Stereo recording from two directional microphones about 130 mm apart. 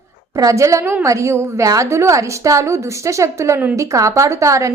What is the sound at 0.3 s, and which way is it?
A woman's voice, 25° right (ahead or behind).